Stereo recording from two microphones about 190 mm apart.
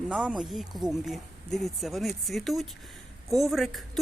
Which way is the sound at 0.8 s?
20° right (ahead or behind).